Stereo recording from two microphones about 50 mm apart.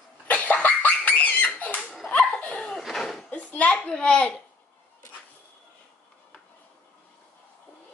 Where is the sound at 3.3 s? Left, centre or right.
Left.